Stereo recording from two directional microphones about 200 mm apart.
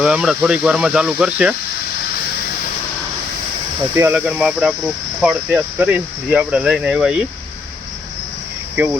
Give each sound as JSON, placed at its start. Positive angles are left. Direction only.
{"t": 0.0, "sound": "speech", "side_deg": -5}
{"t": 3.9, "sound": "speech", "side_deg": -10}